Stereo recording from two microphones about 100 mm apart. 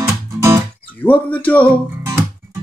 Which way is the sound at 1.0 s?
15° left (ahead or behind).